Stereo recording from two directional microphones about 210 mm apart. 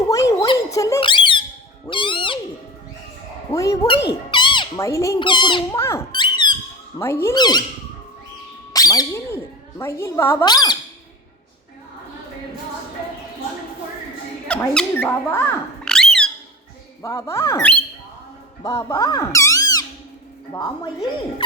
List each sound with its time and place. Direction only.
0.1 s a sound: 15° left (ahead or behind)
1.9 s owl: 25° left (ahead or behind)
3.5 s speech: 15° left (ahead or behind)
8.7 s speech: 15° left (ahead or behind)
14.4 s squeak: 5° left (ahead or behind)
17.0 s a woman's voice: 15° left (ahead or behind)